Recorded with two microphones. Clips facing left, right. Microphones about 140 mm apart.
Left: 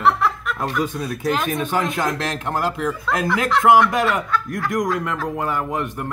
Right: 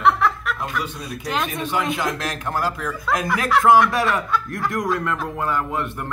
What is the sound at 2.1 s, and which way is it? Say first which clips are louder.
Speech: left 2 dB; 25° left (ahead or behind).